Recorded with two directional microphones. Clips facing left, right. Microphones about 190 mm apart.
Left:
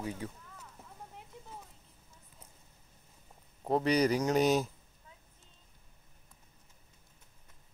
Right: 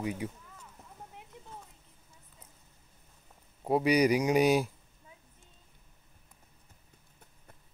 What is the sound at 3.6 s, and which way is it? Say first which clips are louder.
Speech: right 3 dB; 10° right (ahead or behind).